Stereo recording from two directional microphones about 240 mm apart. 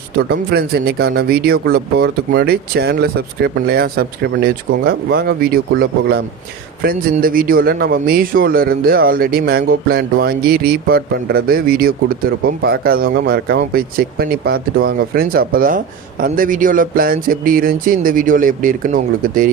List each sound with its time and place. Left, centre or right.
0.2 s speech: right